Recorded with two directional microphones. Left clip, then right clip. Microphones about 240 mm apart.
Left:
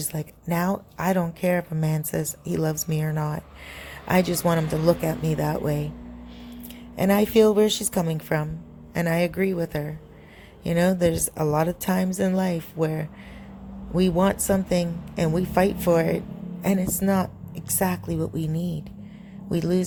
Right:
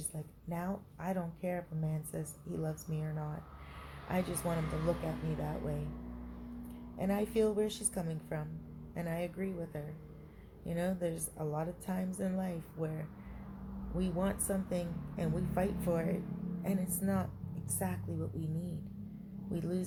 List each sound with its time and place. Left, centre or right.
0.1 s a woman's voice: left
6.9 s a woman's voice: left